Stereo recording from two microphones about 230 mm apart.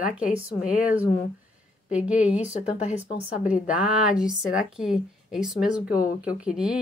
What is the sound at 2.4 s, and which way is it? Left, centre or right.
Speech, left.